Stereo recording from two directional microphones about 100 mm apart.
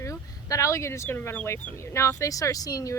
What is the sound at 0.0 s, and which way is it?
Speech, 35° left (ahead or behind).